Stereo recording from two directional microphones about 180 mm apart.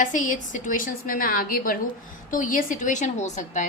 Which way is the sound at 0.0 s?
45° left (ahead or behind).